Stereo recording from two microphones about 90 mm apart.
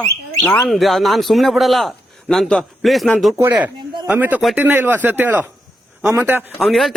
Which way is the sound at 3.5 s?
15° right (ahead or behind).